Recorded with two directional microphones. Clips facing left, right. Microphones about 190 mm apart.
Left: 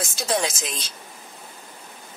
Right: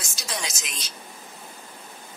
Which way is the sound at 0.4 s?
30° left (ahead or behind).